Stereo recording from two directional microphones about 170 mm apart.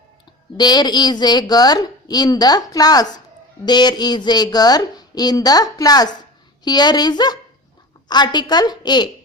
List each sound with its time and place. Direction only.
0.5 s a woman's voice: 25° left (ahead or behind)